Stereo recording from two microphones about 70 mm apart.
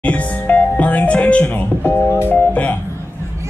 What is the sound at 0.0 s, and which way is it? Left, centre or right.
Music, centre.